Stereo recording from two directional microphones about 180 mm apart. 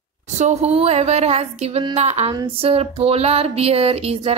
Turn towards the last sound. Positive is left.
turn(degrees=-35)  # may be behind; listen again after turning